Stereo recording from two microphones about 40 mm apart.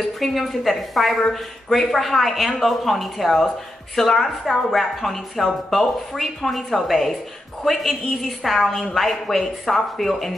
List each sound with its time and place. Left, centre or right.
0.2 s a woman's voice: centre